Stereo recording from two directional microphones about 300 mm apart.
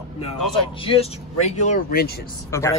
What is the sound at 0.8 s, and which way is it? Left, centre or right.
Speech, centre.